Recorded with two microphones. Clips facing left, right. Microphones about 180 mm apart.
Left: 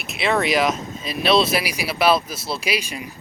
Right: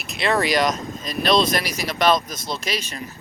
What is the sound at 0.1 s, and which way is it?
Speech, centre (ahead or behind).